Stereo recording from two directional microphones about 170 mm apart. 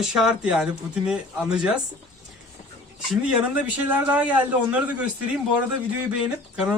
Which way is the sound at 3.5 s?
10° right (ahead or behind).